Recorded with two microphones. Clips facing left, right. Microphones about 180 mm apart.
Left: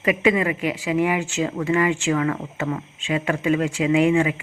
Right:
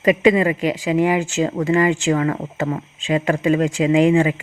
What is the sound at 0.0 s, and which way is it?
Speech, 30° right (ahead or behind).